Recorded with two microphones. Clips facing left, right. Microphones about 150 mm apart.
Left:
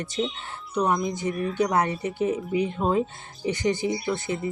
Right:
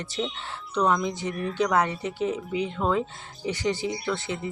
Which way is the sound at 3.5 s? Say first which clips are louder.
Left 2 dB; 50° left (ahead or behind).